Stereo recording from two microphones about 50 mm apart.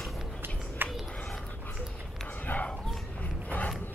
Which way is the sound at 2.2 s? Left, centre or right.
Left.